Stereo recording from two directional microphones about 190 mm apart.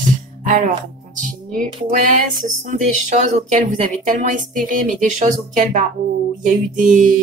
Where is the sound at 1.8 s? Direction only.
40° right (ahead or behind).